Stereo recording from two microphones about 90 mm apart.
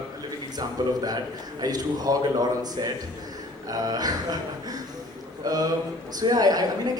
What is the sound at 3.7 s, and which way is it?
Speech, 45° right (ahead or behind).